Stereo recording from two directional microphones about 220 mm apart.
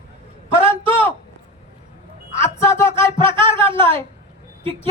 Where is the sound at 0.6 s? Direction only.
25° right (ahead or behind).